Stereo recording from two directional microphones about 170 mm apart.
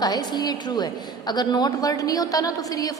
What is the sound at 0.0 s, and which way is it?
A woman's voice, 25° left (ahead or behind).